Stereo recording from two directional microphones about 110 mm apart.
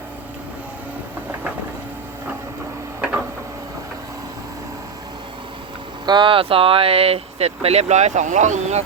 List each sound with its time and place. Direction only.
6.1 s speech: 45° right (ahead or behind); by 8.8 s 90° right